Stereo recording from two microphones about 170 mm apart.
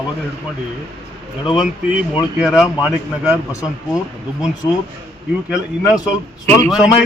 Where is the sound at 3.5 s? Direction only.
20° left (ahead or behind).